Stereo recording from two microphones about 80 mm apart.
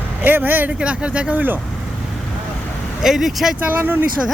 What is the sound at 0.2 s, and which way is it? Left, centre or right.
Speech, right.